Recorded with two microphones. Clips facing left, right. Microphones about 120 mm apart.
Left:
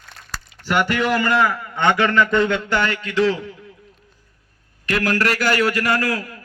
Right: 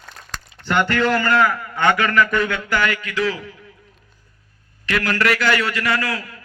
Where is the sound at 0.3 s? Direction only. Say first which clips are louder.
Even; 5° left (ahead or behind); by 3.1 s 30° left (ahead or behind).